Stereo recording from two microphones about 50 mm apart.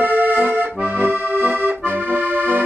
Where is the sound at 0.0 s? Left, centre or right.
Right.